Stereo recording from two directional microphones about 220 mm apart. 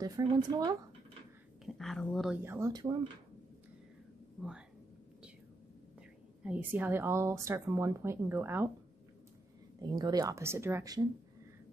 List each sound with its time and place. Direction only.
0.0 s speech: 20° right (ahead or behind)
1.7 s speech: centre (ahead or behind); by 3.1 s 20° right (ahead or behind)
4.4 s speech: 5° right (ahead or behind)
6.4 s speech: 5° right (ahead or behind)
9.8 s speech: 20° right (ahead or behind)